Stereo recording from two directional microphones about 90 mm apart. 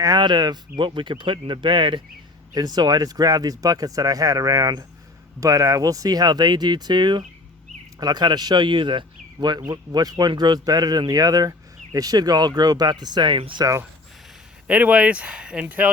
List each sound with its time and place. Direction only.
0.2 s speech: 55° right (ahead or behind)
2.6 s speech: 45° right (ahead or behind); by 13.6 s 70° right (ahead or behind)
14.7 s speech: 15° right (ahead or behind)